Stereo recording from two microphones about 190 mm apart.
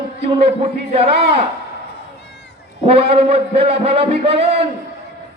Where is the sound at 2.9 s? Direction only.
30° right (ahead or behind).